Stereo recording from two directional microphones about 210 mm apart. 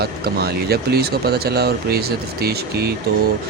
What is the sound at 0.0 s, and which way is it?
Speech, 50° right (ahead or behind).